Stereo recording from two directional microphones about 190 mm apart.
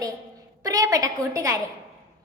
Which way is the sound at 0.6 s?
20° right (ahead or behind).